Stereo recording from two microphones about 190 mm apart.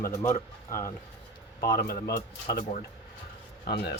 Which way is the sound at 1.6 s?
55° left (ahead or behind).